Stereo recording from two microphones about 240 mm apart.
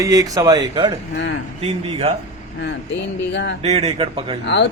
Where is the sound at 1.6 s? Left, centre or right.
Right.